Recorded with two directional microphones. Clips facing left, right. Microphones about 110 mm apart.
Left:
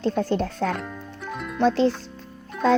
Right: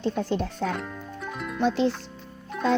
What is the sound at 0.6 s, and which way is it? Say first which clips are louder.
Speech: left 3 dB; 70° left (ahead or behind).